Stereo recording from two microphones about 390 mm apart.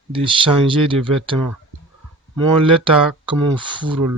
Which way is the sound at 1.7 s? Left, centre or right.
Right.